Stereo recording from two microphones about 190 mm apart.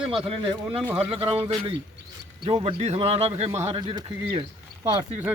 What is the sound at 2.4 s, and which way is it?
Speech, 25° right (ahead or behind).